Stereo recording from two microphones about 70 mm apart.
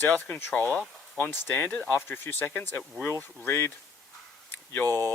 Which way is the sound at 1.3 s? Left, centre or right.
Left.